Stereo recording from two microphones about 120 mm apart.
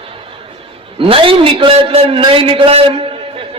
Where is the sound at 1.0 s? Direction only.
50° right (ahead or behind).